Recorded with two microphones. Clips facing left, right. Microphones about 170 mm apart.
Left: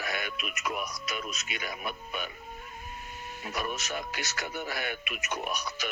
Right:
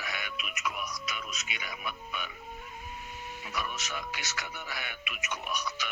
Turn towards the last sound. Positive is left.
turn(degrees=35)  # may be behind; listen again after turning